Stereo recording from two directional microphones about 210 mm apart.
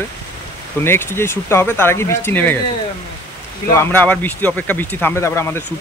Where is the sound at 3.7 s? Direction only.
10° left (ahead or behind).